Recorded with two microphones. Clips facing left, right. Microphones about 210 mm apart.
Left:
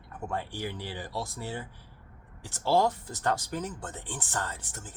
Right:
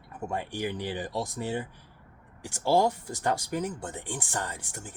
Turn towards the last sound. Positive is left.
turn(degrees=-15)  # may be behind; listen again after turning